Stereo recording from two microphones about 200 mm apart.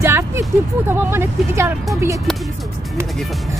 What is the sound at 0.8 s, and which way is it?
Speech, 10° right (ahead or behind).